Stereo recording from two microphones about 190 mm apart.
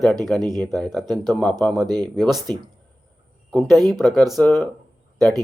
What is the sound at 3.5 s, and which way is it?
Speech, centre (ahead or behind).